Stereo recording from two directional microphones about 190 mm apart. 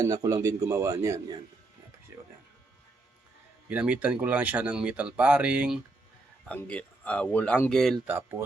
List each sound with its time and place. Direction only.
0.0 s speech: 20° right (ahead or behind)
3.7 s speech: 10° right (ahead or behind)
6.5 s speech: 10° left (ahead or behind)
8.0 s speech: 10° right (ahead or behind)